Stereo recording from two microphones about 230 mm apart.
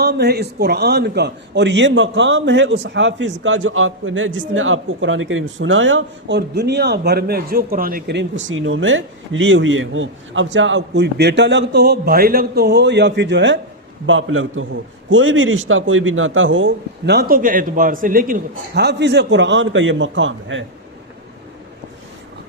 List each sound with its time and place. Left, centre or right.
0.0 s a man's voice: right